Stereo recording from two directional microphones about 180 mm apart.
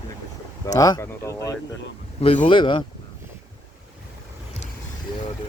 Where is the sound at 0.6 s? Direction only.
20° left (ahead or behind).